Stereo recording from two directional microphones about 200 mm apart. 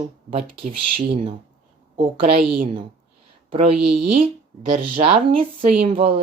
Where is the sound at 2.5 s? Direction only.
30° right (ahead or behind).